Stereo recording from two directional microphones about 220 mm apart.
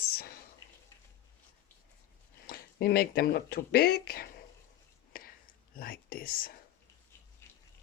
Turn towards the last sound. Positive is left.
turn(degrees=10)  # may be behind; listen again after turning